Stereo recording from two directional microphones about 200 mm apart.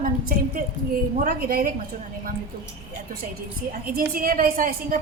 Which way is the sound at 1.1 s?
45° right (ahead or behind).